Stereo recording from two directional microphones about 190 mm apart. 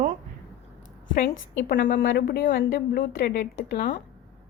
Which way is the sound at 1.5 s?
50° left (ahead or behind).